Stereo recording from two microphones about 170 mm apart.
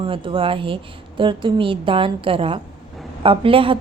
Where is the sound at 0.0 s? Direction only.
30° right (ahead or behind).